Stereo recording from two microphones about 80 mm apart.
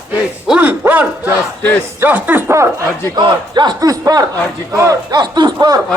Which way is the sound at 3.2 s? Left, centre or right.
Right.